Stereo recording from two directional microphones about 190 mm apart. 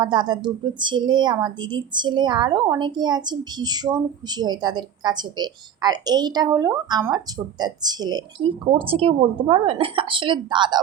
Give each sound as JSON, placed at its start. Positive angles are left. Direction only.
{"t": 0.0, "sound": "speech", "side_deg": -25}